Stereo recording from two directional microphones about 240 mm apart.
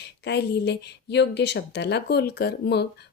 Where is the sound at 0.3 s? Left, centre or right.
Left.